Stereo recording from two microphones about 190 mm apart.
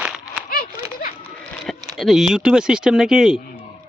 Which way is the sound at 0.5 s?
50° left (ahead or behind).